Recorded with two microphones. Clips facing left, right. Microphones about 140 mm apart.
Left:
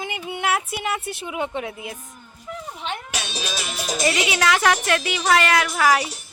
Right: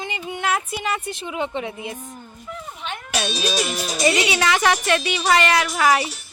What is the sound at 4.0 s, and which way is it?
A woman's voice, centre (ahead or behind).